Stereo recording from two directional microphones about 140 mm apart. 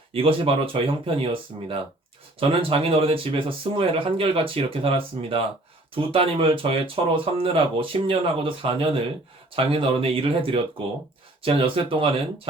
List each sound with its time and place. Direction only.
0.1 s speech: 40° right (ahead or behind)